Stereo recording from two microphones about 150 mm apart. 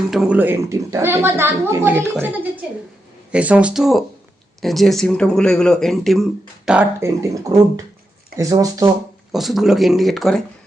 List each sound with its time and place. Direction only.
0.1 s a woman's voice: 5° right (ahead or behind)
7.0 s speech: 20° right (ahead or behind)
8.4 s speech: 25° right (ahead or behind)
9.3 s speech: centre (ahead or behind)